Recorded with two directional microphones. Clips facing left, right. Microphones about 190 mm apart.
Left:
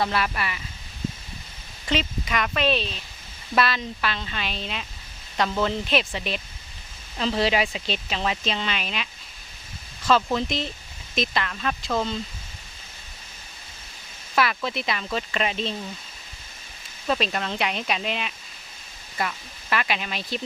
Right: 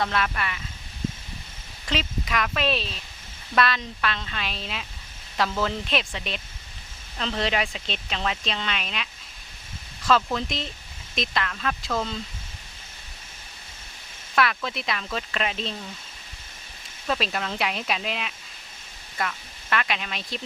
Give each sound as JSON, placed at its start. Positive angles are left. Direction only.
{"t": 0.0, "sound": "speech", "side_deg": 5}
{"t": 1.9, "sound": "speech", "side_deg": 0}
{"t": 14.3, "sound": "speech", "side_deg": 5}
{"t": 17.1, "sound": "speech", "side_deg": 0}